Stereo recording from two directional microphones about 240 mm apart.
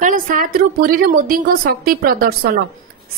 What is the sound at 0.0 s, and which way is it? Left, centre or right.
A woman's voice, right.